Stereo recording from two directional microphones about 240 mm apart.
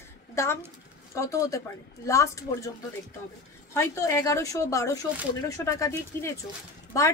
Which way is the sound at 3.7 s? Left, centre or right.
Centre.